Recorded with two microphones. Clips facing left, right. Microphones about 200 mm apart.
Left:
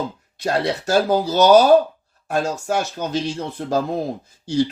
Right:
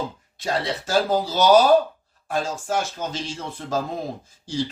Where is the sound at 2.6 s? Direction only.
65° left (ahead or behind).